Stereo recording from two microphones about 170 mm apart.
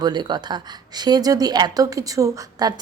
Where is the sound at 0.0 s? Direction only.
25° right (ahead or behind).